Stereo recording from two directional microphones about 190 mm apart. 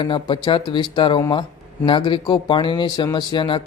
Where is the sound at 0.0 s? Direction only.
25° left (ahead or behind).